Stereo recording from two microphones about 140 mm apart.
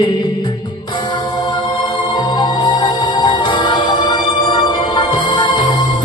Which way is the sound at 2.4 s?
30° left (ahead or behind).